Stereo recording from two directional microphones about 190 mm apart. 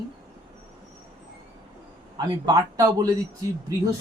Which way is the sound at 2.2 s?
20° right (ahead or behind).